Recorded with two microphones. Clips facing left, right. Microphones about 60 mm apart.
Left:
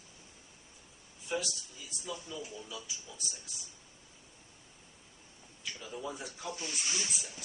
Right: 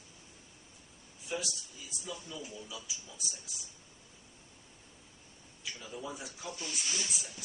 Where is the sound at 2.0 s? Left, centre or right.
Centre.